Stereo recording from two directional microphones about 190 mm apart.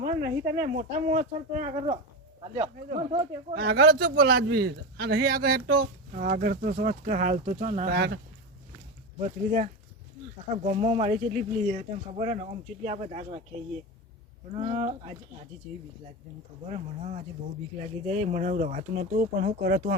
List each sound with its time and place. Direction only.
0.0 s speech: 55° right (ahead or behind)
3.0 s speech: 30° right (ahead or behind)
3.5 s speech: 60° right (ahead or behind); by 7.9 s 40° right (ahead or behind)
7.9 s speech: 60° right (ahead or behind)
9.1 s speech: 35° right (ahead or behind)
14.5 s speech: 30° right (ahead or behind)
16.6 s speech: 35° right (ahead or behind); by 19.8 s 50° right (ahead or behind)